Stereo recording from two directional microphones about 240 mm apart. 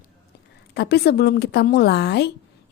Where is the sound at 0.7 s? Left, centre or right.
Left.